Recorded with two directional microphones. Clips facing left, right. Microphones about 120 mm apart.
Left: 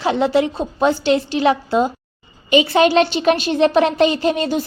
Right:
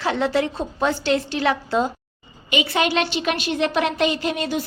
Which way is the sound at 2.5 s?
35° left (ahead or behind).